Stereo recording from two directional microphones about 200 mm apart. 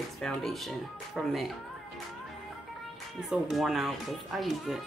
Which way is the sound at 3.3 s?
Centre (ahead or behind).